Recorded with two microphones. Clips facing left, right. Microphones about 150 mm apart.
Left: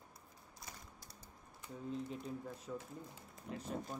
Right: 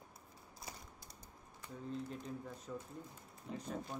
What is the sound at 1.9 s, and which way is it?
Speech, 5° left (ahead or behind).